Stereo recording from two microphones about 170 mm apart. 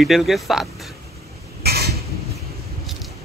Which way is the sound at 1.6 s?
70° right (ahead or behind).